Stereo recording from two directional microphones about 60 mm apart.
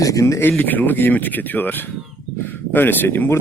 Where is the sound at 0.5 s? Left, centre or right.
Left.